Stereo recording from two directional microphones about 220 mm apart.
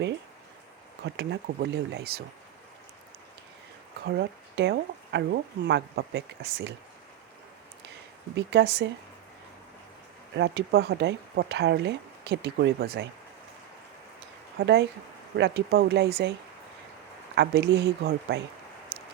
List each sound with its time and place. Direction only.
1.0 s speech: 50° right (ahead or behind)
4.0 s speech: 50° right (ahead or behind)
8.4 s speech: 50° right (ahead or behind)
10.3 s speech: 50° right (ahead or behind)
14.6 s speech: 50° right (ahead or behind)
17.3 s speech: 50° right (ahead or behind)